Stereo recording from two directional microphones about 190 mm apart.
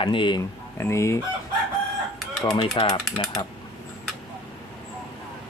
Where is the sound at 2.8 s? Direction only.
30° left (ahead or behind).